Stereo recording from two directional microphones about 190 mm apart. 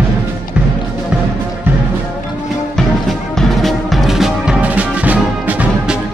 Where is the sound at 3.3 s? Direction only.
Centre (ahead or behind).